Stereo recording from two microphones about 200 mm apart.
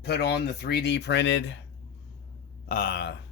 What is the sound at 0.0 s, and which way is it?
Speech, 55° left (ahead or behind).